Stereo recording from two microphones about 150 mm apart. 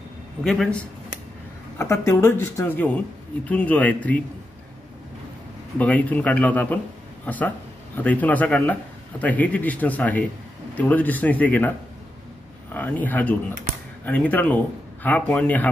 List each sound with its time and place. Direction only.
0.4 s speech: centre (ahead or behind)
1.8 s speech: 20° left (ahead or behind)
5.8 s speech: 10° left (ahead or behind)
12.7 s speech: 10° left (ahead or behind)